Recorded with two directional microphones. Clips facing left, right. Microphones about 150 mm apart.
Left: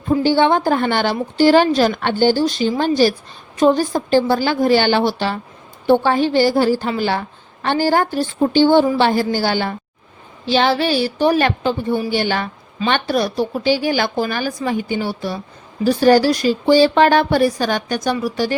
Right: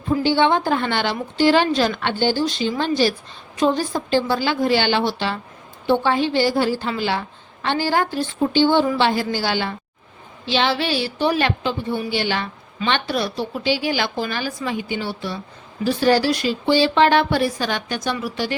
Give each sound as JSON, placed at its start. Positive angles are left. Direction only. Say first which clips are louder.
{"t": 0.2, "sound": "a woman's voice", "louder": "left 2 dB", "side_deg": 40}